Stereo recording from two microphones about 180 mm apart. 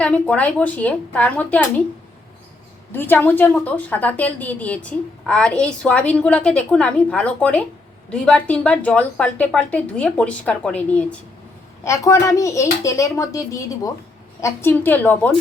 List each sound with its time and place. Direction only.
0.0 s a woman's voice: 5° left (ahead or behind)
2.9 s a woman's voice: 10° left (ahead or behind)
11.9 s a woman's voice: 15° left (ahead or behind)